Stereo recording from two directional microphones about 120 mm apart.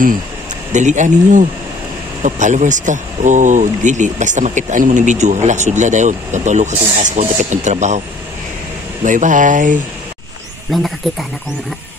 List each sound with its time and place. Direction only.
0.7 s speech: 90° right
9.0 s speech: 90° right
10.7 s speech: centre (ahead or behind)